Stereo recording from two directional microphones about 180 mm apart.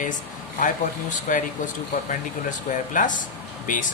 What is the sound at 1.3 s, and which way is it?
Speech, 45° left (ahead or behind).